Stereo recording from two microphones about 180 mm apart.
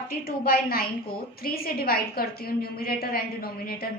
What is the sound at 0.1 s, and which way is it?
A woman's voice, 55° left (ahead or behind).